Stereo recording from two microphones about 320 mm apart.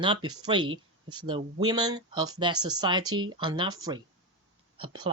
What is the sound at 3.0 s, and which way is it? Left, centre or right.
Speech, right.